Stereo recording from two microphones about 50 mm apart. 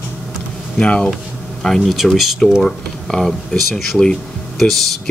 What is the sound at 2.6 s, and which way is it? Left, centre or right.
Speech, centre.